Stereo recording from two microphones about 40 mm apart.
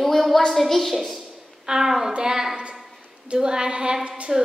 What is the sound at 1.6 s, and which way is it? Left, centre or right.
A woman's voice, centre.